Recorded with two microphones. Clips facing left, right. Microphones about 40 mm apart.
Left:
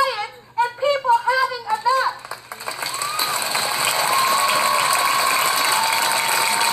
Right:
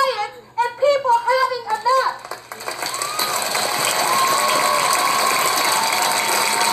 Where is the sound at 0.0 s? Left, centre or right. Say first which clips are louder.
Right 1 dB; centre.